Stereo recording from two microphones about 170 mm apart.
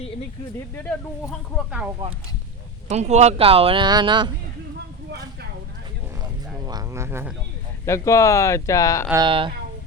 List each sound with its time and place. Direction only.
2.0 s speech: 35° right (ahead or behind)
6.7 s speech: 20° right (ahead or behind)
7.9 s speech: 15° left (ahead or behind)
9.1 s speech: 30° right (ahead or behind)